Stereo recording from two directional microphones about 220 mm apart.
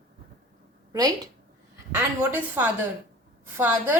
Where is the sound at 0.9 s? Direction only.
15° right (ahead or behind).